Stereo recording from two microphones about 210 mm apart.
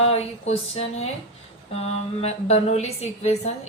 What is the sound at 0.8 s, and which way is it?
Speech, 30° left (ahead or behind).